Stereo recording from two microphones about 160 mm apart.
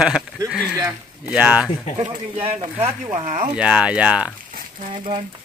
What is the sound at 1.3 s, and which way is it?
Speech, 5° right (ahead or behind).